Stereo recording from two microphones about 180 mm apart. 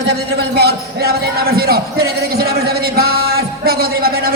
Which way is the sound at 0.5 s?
60° right (ahead or behind).